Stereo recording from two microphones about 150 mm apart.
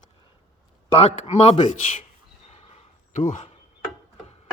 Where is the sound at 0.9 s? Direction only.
40° left (ahead or behind).